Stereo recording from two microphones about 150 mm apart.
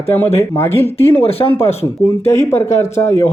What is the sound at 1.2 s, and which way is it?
Speech, 40° left (ahead or behind).